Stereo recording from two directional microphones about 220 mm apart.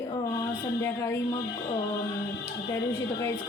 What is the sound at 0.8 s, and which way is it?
Speech, 10° left (ahead or behind).